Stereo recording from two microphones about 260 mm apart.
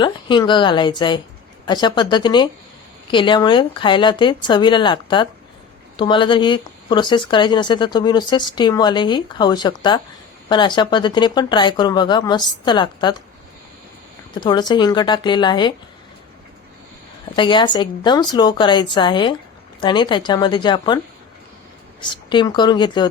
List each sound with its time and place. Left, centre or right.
0.0 s speech: centre
14.3 s speech: centre
17.3 s speech: centre
22.0 s speech: centre